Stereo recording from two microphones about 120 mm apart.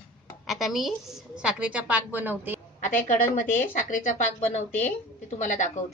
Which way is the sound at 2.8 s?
90° left.